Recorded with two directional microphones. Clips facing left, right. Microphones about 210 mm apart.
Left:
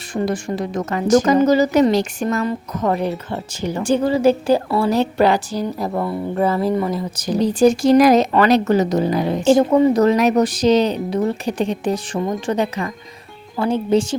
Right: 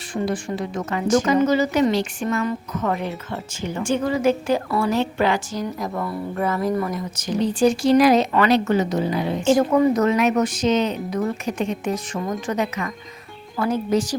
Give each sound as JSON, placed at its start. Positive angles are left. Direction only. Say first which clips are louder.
{"t": 0.1, "sound": "speech", "louder": "left 3 dB", "side_deg": 40}
{"t": 9.6, "sound": "speech", "louder": "left 3 dB", "side_deg": 25}